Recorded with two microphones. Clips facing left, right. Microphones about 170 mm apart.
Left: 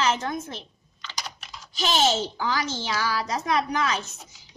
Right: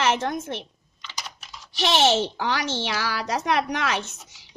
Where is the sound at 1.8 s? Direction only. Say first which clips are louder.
Right 3 dB; 75° right (ahead or behind).